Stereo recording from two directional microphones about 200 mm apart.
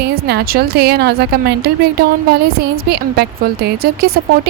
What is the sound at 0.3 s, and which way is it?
A woman's voice, 50° right (ahead or behind).